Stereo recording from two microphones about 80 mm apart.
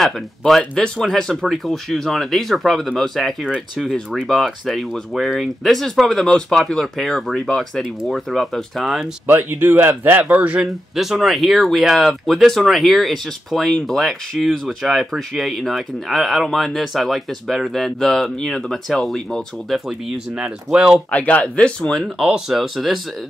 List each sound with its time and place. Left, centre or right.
0.0 s speech: centre
3.4 s speech: centre
9.2 s speech: right
11.0 s speech: centre
19.9 s speech: centre
21.1 s speech: centre
22.0 s speech: centre